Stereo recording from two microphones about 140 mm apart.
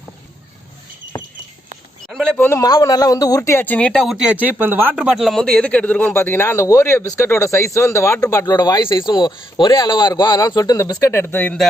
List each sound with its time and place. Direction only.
1.1 s a sound: 30° left (ahead or behind)
2.0 s speech: 5° left (ahead or behind)
2.5 s a man's voice: 25° left (ahead or behind)